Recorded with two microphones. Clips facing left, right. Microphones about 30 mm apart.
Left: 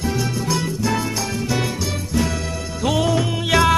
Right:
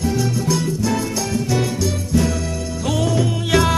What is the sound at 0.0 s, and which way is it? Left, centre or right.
Music, centre.